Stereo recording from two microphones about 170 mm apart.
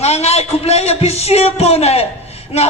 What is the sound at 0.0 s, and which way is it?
A man's voice, 40° left (ahead or behind).